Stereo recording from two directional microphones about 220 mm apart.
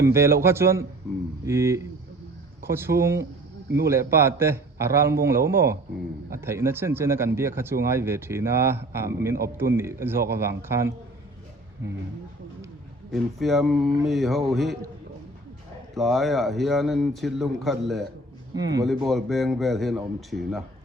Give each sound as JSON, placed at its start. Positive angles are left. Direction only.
{"t": 0.0, "sound": "a man's voice", "side_deg": -10}
{"t": 13.1, "sound": "a man's voice", "side_deg": 0}
{"t": 16.0, "sound": "a man's voice", "side_deg": 0}
{"t": 18.5, "sound": "a man's voice", "side_deg": -15}
{"t": 19.0, "sound": "a man's voice", "side_deg": 0}